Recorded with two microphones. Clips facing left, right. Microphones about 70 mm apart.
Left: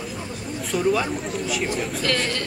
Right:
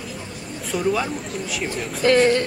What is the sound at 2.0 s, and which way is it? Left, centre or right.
Speech, right.